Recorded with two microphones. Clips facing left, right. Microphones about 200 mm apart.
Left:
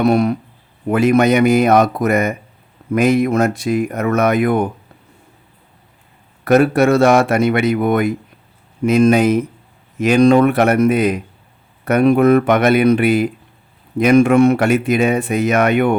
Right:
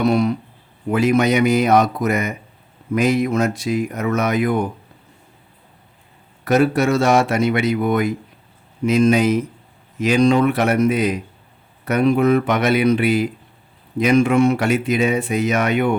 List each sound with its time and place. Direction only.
0.0 s speech: 55° left (ahead or behind)
6.4 s speech: 55° left (ahead or behind)